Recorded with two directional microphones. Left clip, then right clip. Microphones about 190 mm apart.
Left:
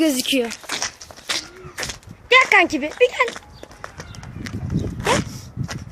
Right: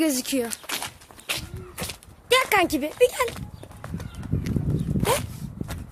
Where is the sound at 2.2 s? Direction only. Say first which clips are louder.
Left 7 dB; 20° right (ahead or behind).